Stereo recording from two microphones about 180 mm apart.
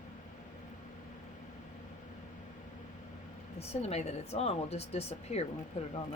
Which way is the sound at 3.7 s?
35° left (ahead or behind).